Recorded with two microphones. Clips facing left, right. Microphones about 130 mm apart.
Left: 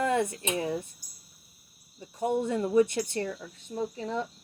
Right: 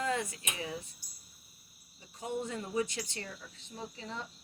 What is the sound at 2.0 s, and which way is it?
Speech, 55° left (ahead or behind).